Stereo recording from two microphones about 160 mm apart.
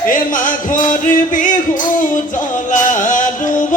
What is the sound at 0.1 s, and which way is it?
Music, 55° left (ahead or behind).